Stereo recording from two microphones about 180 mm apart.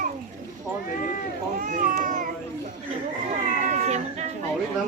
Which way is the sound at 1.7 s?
45° right (ahead or behind).